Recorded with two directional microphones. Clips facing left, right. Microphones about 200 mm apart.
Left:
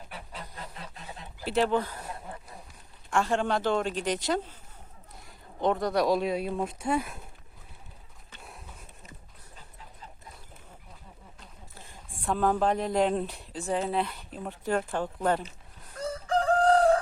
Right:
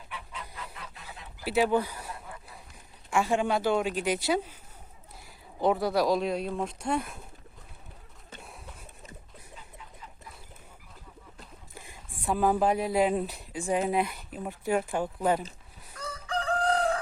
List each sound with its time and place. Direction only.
0.1 s fowl: 40° left (ahead or behind)
0.5 s goose: 35° left (ahead or behind)
1.5 s speech: 10° right (ahead or behind)
3.1 s speech: 10° right (ahead or behind)
8.4 s a sound: centre (ahead or behind)
11.7 s speech: 10° right (ahead or behind)
16.0 s chicken: 45° left (ahead or behind)